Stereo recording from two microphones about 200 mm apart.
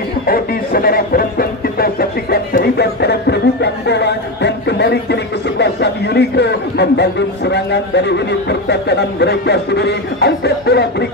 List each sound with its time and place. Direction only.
0.3 s speech: 50° left (ahead or behind)